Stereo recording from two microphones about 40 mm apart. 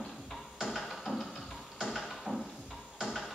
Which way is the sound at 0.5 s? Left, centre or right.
Centre.